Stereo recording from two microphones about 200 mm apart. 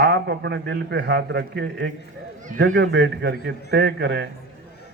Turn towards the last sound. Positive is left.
turn(degrees=-60)  # may be behind; listen again after turning